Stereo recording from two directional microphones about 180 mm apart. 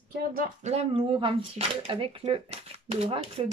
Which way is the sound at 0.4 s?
35° right (ahead or behind).